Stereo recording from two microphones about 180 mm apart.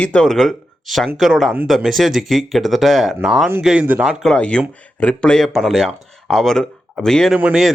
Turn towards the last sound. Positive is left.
turn(degrees=-5)  # may be behind; listen again after turning